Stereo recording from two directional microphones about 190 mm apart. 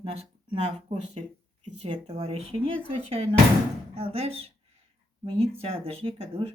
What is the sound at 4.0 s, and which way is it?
Speech, 30° right (ahead or behind).